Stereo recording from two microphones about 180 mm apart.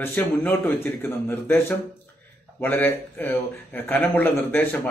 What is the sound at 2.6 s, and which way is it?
Speech, 10° left (ahead or behind).